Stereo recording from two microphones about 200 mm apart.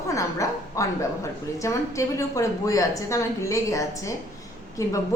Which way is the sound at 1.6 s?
15° left (ahead or behind).